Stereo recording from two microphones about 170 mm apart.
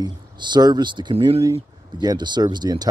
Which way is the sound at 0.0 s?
25° right (ahead or behind).